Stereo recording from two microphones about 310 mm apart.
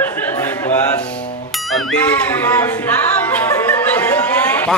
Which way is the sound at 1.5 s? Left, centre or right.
Centre.